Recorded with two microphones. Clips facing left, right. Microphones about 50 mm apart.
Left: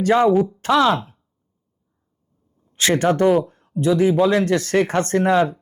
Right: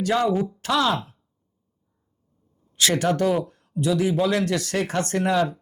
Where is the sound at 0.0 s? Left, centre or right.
Left.